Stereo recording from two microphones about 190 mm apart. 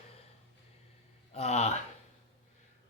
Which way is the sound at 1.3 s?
35° left (ahead or behind).